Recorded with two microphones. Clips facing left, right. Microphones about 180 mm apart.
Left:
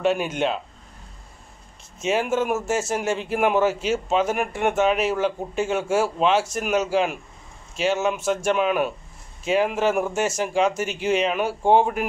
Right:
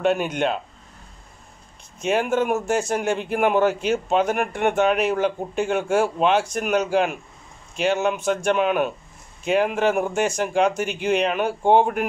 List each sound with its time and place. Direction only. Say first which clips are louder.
0.1 s speech: right 1 dB; 5° left (ahead or behind)
2.0 s speech: right 1 dB; 5° left (ahead or behind)